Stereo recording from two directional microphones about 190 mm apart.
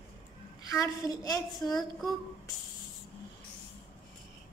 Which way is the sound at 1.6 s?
Centre (ahead or behind).